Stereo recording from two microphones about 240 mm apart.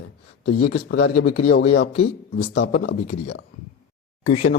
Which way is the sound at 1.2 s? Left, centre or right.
Left.